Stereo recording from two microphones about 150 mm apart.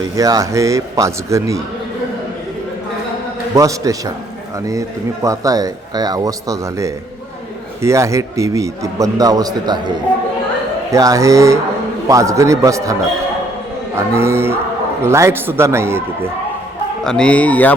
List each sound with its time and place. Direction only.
0.2 s speech: 25° right (ahead or behind)
3.5 s speech: 20° right (ahead or behind)
17.0 s speech: 5° left (ahead or behind)